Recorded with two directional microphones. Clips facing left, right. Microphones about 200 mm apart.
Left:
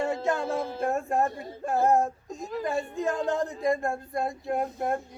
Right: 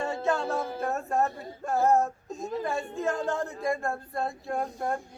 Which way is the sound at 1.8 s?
15° left (ahead or behind).